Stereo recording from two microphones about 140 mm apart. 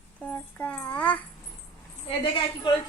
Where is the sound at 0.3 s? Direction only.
10° left (ahead or behind).